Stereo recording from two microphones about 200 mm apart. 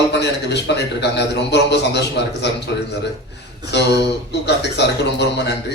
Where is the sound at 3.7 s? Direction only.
60° left (ahead or behind).